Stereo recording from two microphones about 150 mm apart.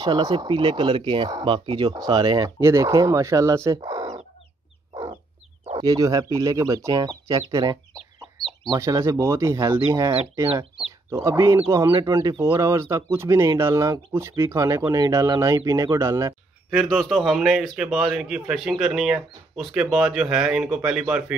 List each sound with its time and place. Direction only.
0.3 s speech: 30° right (ahead or behind)
5.7 s speech: 30° right (ahead or behind)
16.7 s speech: centre (ahead or behind)